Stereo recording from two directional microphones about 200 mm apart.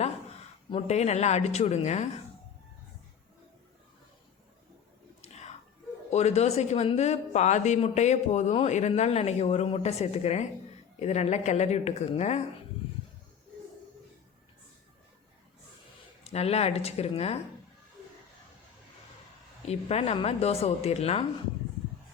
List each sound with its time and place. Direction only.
0.7 s a man's voice: 35° left (ahead or behind)
5.2 s whispering: 35° left (ahead or behind)
6.1 s a man's voice: 35° left (ahead or behind)
16.2 s a man's voice: 30° left (ahead or behind)
19.6 s a man's voice: 30° left (ahead or behind)